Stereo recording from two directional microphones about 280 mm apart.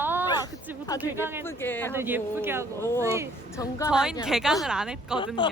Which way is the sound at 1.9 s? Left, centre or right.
Centre.